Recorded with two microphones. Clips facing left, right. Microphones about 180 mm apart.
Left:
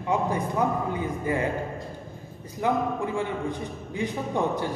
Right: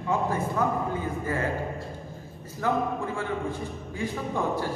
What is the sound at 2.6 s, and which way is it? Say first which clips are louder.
A man's voice: left 1 dB; 20° left (ahead or behind).